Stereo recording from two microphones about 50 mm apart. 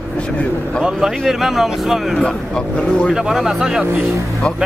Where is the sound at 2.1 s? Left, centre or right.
Centre.